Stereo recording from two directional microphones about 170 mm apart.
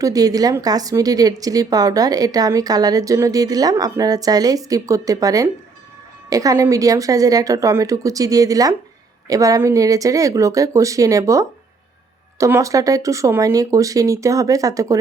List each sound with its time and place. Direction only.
0.0 s speech: 20° right (ahead or behind)